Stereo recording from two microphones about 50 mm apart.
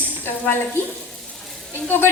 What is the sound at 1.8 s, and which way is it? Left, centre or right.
Speech, left.